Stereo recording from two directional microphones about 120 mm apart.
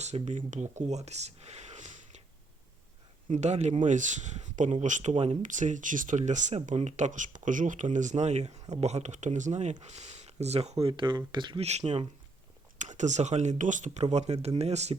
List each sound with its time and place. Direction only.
0.0 s speech: 75° right (ahead or behind)
3.2 s speech: 75° right (ahead or behind)
3.8 s speech: 90° right; by 10.9 s 60° right (ahead or behind)
10.9 s speech: 40° right (ahead or behind)
11.6 s speech: 65° right (ahead or behind)
12.8 s speech: 85° right; by 14.9 s 65° right (ahead or behind)